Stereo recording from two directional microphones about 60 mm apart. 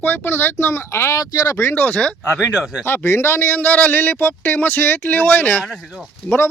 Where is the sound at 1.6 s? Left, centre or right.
Left.